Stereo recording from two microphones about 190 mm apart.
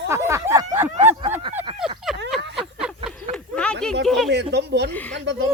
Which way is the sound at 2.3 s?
Centre (ahead or behind).